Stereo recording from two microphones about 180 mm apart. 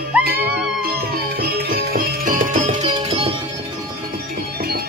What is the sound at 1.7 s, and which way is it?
Music, 55° right (ahead or behind).